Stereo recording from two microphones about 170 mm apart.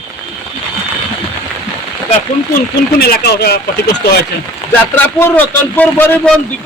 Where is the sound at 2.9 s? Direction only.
70° left (ahead or behind).